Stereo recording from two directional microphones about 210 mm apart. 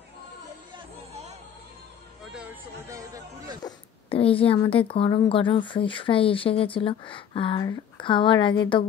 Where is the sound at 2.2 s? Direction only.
5° right (ahead or behind).